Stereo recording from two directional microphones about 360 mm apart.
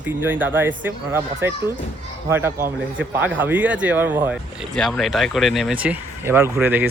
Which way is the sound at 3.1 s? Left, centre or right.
Centre.